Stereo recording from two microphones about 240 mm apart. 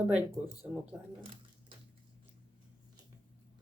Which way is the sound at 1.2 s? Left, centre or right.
Right.